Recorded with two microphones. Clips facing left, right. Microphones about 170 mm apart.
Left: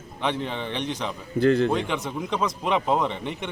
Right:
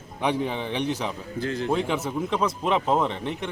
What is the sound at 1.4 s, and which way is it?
Speech, 60° left (ahead or behind).